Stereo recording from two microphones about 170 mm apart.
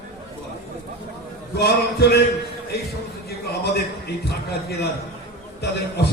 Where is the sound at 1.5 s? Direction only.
70° left (ahead or behind).